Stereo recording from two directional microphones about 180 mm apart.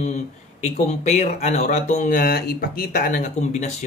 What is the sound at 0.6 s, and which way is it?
Speech, 40° left (ahead or behind).